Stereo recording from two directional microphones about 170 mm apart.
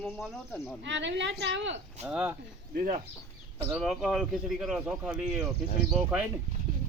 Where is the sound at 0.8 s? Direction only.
90° right.